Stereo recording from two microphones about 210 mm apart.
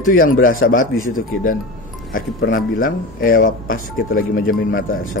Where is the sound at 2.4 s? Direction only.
70° left (ahead or behind).